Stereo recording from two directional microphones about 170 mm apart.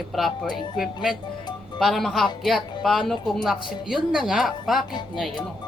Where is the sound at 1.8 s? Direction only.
Centre (ahead or behind).